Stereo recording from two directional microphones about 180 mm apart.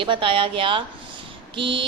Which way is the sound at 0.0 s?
30° right (ahead or behind).